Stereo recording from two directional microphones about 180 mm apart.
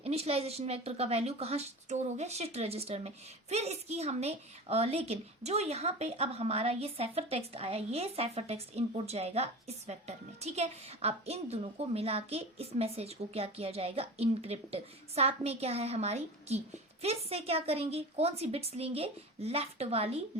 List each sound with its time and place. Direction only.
0.0 s a woman's voice: 35° right (ahead or behind)